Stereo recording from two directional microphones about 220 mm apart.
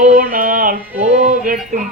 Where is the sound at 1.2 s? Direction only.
35° right (ahead or behind).